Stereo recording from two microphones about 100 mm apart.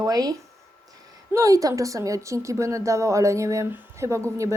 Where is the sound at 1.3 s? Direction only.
35° right (ahead or behind).